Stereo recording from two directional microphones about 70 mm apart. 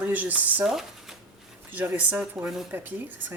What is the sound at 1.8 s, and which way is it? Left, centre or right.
A woman's voice, right.